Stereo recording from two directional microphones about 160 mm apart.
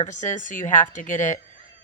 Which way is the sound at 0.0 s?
50° left (ahead or behind).